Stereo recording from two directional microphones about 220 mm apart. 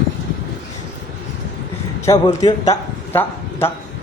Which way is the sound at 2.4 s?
15° left (ahead or behind).